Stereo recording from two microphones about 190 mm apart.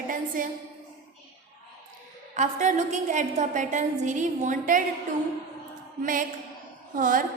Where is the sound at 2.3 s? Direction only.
40° right (ahead or behind).